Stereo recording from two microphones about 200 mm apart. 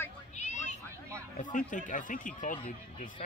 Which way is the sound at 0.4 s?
35° left (ahead or behind).